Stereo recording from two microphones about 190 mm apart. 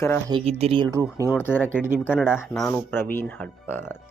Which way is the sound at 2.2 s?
Centre (ahead or behind).